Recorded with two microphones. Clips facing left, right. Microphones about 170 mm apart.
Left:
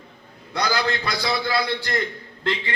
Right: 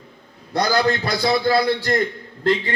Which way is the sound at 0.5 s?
40° right (ahead or behind).